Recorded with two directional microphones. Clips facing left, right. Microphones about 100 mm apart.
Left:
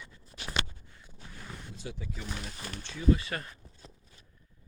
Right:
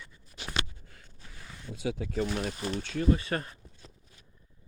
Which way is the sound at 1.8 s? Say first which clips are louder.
Right 11 dB; 90° right.